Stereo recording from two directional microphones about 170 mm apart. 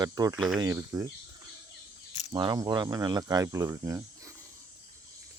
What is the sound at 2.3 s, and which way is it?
Speech, 25° right (ahead or behind).